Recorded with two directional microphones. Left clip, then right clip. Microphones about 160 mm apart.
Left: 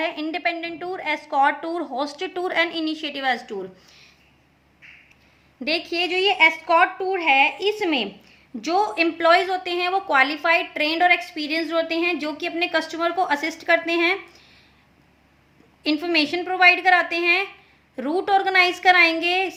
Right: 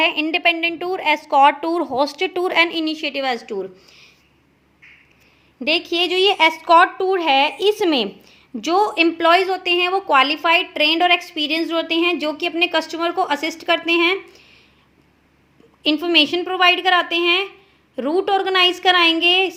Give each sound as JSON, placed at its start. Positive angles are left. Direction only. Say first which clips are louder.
{"t": 0.0, "sound": "a woman's voice", "louder": "right 8 dB", "side_deg": -30}
{"t": 5.5, "sound": "a woman's voice", "louder": "right 5 dB", "side_deg": -30}
{"t": 8.6, "sound": "a woman's voice", "louder": "right 4 dB", "side_deg": -35}
{"t": 15.8, "sound": "a woman's voice", "louder": "right 5 dB", "side_deg": -25}